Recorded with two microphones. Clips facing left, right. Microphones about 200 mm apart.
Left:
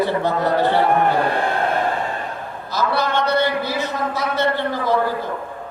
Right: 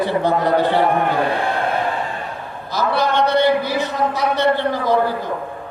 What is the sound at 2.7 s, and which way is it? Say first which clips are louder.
A man's voice: right 2 dB; 15° right (ahead or behind).